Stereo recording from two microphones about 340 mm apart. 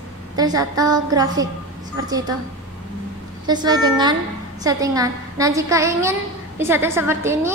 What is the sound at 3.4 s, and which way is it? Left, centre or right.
A woman's voice, centre.